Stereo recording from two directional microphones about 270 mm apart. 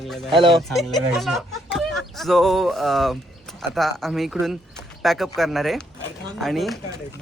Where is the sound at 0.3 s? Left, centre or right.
Centre.